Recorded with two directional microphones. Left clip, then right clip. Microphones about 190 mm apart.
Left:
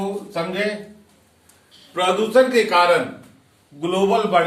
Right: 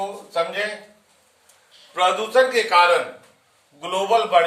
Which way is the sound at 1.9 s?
30° right (ahead or behind).